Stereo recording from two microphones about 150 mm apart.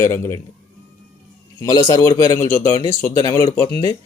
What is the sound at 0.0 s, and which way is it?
Speech, 15° left (ahead or behind).